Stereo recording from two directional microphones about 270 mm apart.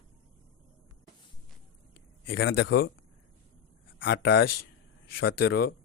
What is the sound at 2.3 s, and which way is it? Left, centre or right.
Speech, left.